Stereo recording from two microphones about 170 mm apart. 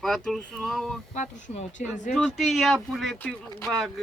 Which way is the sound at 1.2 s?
45° left (ahead or behind).